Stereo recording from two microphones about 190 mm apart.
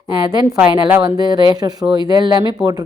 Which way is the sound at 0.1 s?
20° right (ahead or behind).